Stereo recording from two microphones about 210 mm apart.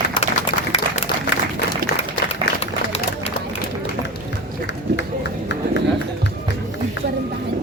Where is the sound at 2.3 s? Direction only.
30° left (ahead or behind).